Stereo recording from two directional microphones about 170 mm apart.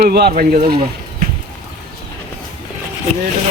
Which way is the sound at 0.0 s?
65° right (ahead or behind).